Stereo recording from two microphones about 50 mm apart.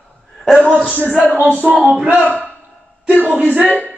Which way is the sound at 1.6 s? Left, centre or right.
Right.